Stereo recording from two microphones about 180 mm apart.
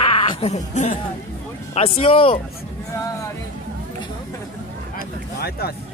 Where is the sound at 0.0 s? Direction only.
30° left (ahead or behind).